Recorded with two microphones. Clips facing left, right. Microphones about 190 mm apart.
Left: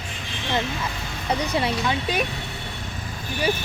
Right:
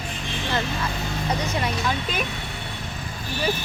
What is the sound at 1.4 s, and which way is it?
Speech, 35° left (ahead or behind).